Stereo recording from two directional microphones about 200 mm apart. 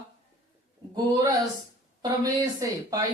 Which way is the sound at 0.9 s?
20° right (ahead or behind).